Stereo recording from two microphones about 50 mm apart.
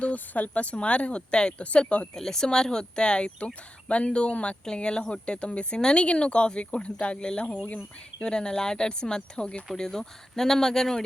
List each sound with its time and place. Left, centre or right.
0.0 s speech: left
2.1 s speech: centre